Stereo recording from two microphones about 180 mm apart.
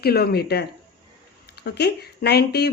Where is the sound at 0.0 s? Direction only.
60° left (ahead or behind).